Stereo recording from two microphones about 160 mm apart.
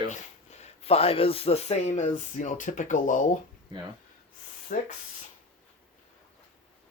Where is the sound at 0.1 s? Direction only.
45° left (ahead or behind).